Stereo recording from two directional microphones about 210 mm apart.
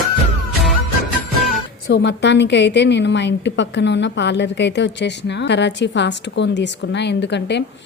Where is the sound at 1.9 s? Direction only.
55° left (ahead or behind).